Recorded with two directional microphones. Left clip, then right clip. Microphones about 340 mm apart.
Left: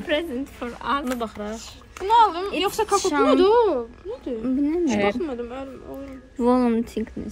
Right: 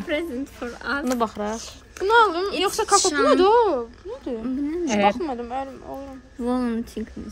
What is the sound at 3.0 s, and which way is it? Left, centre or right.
Speech, centre.